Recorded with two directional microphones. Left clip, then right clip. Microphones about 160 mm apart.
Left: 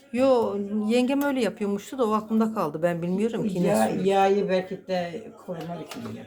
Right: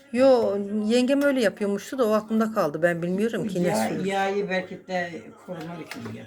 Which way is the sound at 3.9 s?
45° left (ahead or behind).